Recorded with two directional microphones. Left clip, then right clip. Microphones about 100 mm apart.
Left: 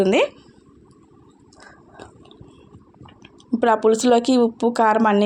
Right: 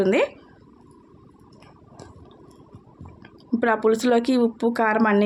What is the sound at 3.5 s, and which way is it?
Speech, 10° left (ahead or behind).